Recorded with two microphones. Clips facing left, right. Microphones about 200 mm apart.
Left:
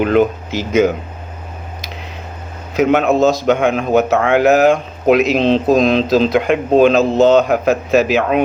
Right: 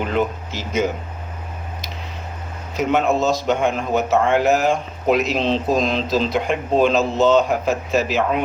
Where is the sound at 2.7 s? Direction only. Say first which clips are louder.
Left 6 dB; 70° left (ahead or behind).